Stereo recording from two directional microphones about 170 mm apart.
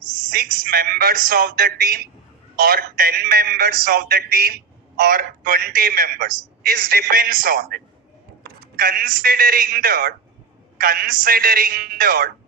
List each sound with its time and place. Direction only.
0.3 s a man's voice: 60° right (ahead or behind)